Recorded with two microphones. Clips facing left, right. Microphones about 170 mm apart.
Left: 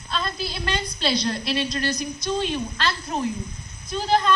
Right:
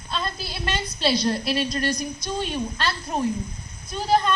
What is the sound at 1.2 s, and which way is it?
Speech, 40° right (ahead or behind).